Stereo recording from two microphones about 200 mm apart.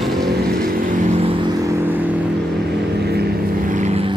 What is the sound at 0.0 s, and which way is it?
Vehicle, centre (ahead or behind).